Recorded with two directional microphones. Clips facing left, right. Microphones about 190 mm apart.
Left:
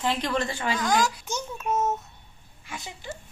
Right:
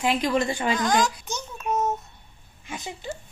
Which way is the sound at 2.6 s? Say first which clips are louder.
Right 4 dB; 20° right (ahead or behind).